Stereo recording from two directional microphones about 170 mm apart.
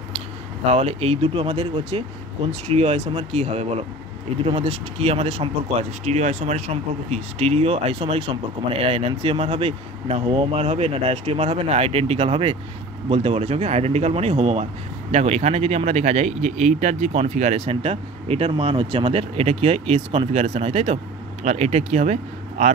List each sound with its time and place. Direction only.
0.7 s speech: 35° right (ahead or behind)